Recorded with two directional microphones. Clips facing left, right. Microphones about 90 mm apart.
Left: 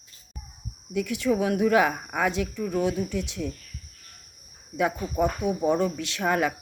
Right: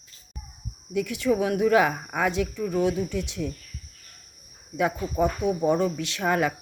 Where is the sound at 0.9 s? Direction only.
Centre (ahead or behind).